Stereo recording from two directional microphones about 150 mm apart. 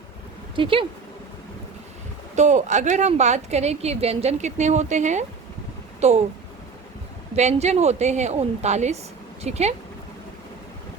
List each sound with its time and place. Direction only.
0.5 s speech: 35° right (ahead or behind)
2.3 s a woman's voice: 50° right (ahead or behind)
7.3 s a woman's voice: 45° right (ahead or behind)